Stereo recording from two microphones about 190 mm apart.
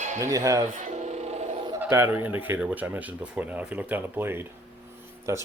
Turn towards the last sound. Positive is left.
turn(degrees=-10)  # may be behind; listen again after turning